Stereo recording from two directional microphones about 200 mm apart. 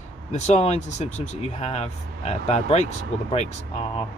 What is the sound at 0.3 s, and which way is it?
Speech, 35° left (ahead or behind).